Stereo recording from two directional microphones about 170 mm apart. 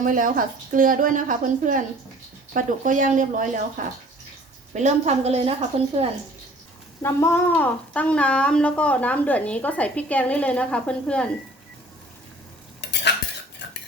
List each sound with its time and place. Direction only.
0.0 s a woman's voice: 50° right (ahead or behind)
4.7 s a woman's voice: 45° right (ahead or behind)
7.0 s a woman's voice: 15° left (ahead or behind)
12.8 s cutlery: 90° left